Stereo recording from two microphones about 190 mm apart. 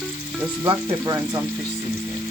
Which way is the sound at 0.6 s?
20° right (ahead or behind).